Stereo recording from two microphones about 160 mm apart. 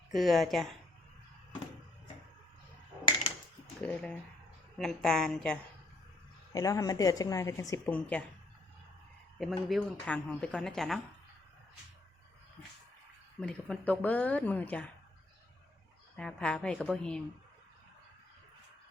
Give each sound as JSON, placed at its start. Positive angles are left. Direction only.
{"t": 0.1, "sound": "speech", "side_deg": 0}
{"t": 3.8, "sound": "speech", "side_deg": 10}
{"t": 6.5, "sound": "a woman's voice", "side_deg": 20}
{"t": 7.9, "sound": "speech", "side_deg": 10}
{"t": 9.4, "sound": "speech", "side_deg": 0}
{"t": 13.4, "sound": "speech", "side_deg": 5}
{"t": 16.1, "sound": "speech", "side_deg": 5}